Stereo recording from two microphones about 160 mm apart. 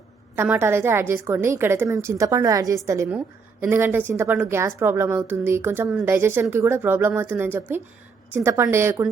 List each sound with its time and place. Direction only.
0.3 s a woman's voice: 10° right (ahead or behind)